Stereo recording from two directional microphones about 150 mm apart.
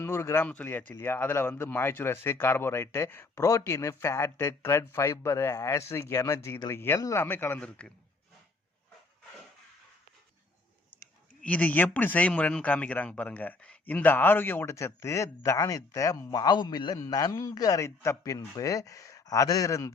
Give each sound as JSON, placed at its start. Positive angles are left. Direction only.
{"t": 0.0, "sound": "speech", "side_deg": 15}
{"t": 11.4, "sound": "speech", "side_deg": 10}